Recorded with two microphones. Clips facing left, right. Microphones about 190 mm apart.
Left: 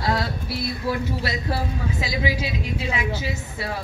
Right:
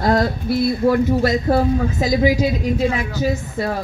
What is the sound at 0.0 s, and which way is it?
Speech, 50° right (ahead or behind).